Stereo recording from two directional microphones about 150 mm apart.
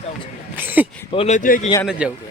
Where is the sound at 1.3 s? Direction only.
60° left (ahead or behind).